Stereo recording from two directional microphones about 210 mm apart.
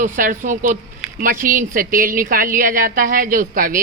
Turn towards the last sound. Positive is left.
turn(degrees=-40)  # may be behind; listen again after turning